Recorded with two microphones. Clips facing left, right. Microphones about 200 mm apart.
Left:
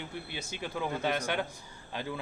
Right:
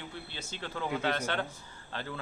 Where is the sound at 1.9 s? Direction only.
15° left (ahead or behind).